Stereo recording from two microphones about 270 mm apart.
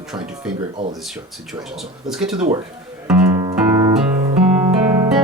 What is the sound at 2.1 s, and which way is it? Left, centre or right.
Speech, centre.